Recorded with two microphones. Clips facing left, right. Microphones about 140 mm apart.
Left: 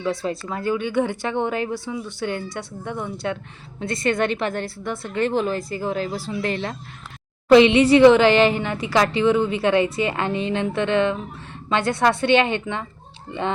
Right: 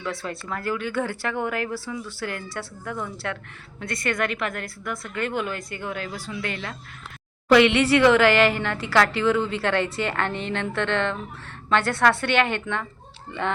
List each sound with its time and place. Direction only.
0.0 s a woman's voice: 20° left (ahead or behind)
7.5 s a woman's voice: 20° left (ahead or behind)